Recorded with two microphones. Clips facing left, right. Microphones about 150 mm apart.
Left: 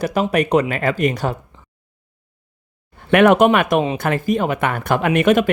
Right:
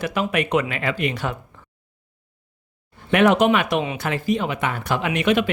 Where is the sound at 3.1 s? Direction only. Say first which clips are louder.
Left 4 dB; 55° left (ahead or behind).